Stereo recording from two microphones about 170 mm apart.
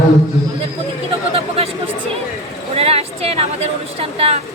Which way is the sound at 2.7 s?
35° right (ahead or behind).